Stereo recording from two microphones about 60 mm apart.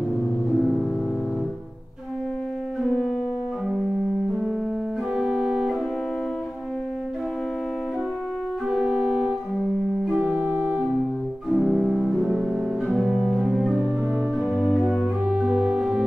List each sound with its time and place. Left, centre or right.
0.6 s music: centre
5.1 s organ: centre
8.6 s organ: centre
10.2 s organ: right
11.4 s organ: centre
12.2 s music: centre
14.4 s organ: centre
15.2 s organ: centre